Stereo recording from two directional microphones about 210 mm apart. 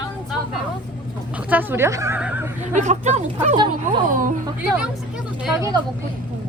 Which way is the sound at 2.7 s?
35° right (ahead or behind).